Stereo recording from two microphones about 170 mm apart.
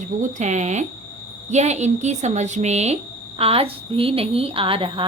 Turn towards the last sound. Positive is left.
turn(degrees=-30)  # may be behind; listen again after turning